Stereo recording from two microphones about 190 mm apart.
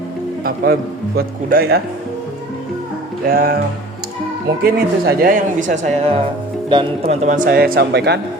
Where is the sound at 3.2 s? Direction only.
55° right (ahead or behind).